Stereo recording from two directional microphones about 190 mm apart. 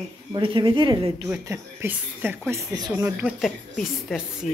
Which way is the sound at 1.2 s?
15° right (ahead or behind).